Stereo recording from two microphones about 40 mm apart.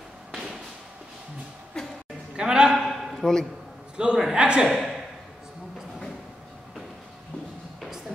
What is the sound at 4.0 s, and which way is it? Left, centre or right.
Speech, right.